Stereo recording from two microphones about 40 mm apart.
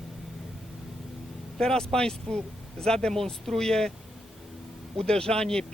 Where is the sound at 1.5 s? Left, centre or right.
Centre.